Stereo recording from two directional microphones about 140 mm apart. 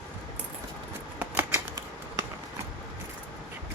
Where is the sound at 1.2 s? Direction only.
15° right (ahead or behind).